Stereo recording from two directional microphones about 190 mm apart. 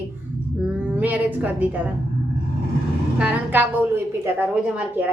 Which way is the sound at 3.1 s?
5° right (ahead or behind).